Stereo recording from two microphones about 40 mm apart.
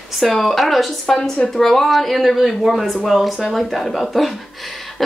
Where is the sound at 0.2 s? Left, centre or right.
Centre.